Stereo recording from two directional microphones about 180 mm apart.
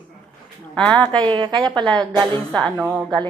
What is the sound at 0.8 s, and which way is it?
Speech, 5° left (ahead or behind).